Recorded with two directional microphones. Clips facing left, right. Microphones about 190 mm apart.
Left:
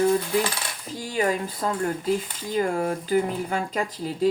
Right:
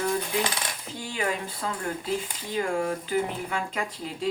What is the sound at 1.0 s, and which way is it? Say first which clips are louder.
Speech: left 6 dB; 40° left (ahead or behind).